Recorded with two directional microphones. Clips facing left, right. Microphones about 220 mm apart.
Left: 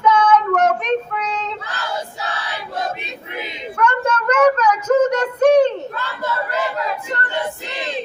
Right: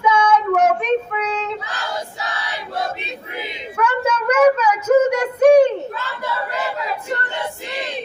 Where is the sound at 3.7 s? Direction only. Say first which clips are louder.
Even; 5° right (ahead or behind).